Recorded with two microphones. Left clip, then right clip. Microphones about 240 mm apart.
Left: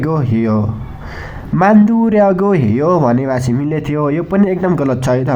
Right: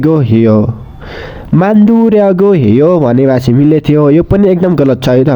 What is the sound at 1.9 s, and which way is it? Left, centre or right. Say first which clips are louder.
Speech: right 4 dB; right.